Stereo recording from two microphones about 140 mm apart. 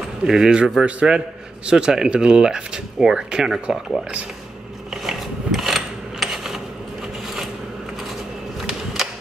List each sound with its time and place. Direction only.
0.2 s speech: 5° right (ahead or behind)
5.0 s mechanisms: centre (ahead or behind)
8.6 s a sound: 5° right (ahead or behind)